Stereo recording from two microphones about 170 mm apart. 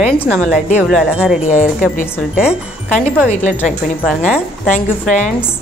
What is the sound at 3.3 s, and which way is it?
Speech, 45° left (ahead or behind).